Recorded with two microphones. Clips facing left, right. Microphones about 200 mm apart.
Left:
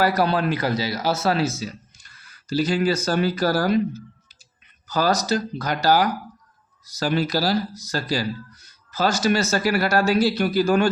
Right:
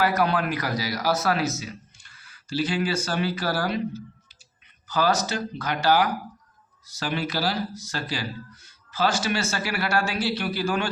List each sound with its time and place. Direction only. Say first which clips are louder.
0.0 s speech: left 3 dB; 35° left (ahead or behind)